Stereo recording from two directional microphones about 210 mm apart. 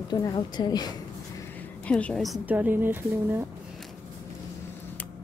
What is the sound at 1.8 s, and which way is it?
Speech, 5° left (ahead or behind).